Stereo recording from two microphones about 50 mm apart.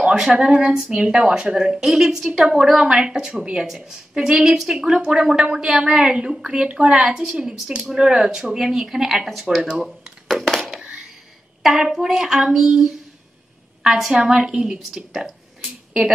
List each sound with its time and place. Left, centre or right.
0.1 s a woman's voice: centre
7.4 s a woman's voice: centre
10.2 s a sound: centre
11.8 s a woman's voice: centre
14.2 s a woman's voice: centre
15.2 s a sound: centre